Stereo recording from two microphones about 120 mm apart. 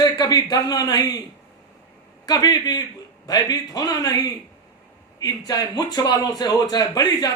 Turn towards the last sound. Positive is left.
turn(degrees=30)  # may be behind; listen again after turning